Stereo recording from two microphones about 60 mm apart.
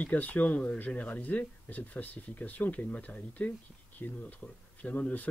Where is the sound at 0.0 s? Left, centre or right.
Left.